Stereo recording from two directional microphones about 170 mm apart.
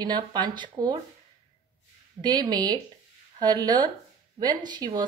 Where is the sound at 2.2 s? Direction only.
25° right (ahead or behind).